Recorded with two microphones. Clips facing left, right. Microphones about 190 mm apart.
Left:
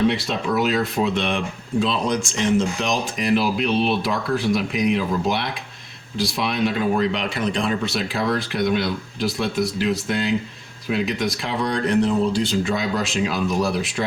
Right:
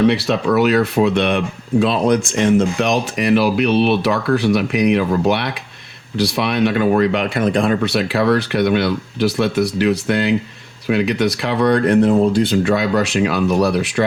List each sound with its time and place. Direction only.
0.1 s speech: 70° right (ahead or behind)